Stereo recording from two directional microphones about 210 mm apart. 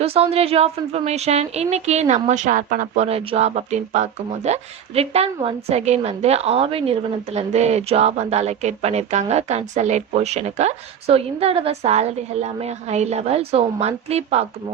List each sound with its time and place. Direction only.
0.0 s speech: 30° right (ahead or behind)